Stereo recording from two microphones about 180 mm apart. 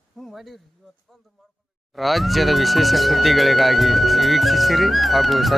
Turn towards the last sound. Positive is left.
turn(degrees=0)  # may be behind; listen again after turning